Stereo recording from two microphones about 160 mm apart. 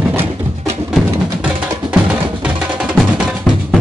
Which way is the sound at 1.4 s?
5° right (ahead or behind).